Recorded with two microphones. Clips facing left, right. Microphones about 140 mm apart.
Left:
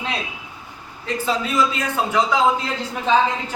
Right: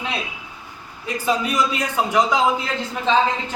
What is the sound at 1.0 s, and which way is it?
Speech, 15° right (ahead or behind).